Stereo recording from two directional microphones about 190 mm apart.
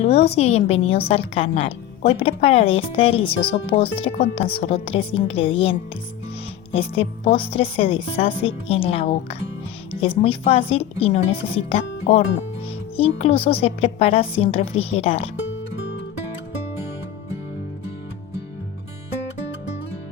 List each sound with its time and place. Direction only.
0.0 s a woman's voice: 35° left (ahead or behind)
6.7 s a woman's voice: 30° left (ahead or behind)